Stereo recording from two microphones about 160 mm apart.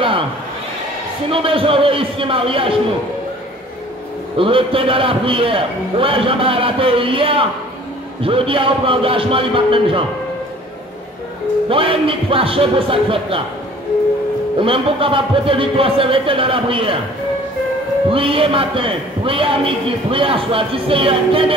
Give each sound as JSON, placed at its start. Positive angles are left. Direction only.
{"t": 1.3, "sound": "a man's voice", "side_deg": -35}
{"t": 4.4, "sound": "a man's voice", "side_deg": -35}
{"t": 11.7, "sound": "a man's voice", "side_deg": -35}
{"t": 14.6, "sound": "a man's voice", "side_deg": -35}
{"t": 18.1, "sound": "a man's voice", "side_deg": -35}